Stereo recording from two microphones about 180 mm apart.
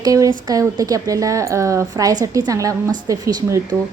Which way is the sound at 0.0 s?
20° right (ahead or behind).